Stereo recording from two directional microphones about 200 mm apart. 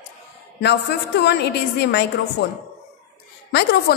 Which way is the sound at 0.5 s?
60° left (ahead or behind).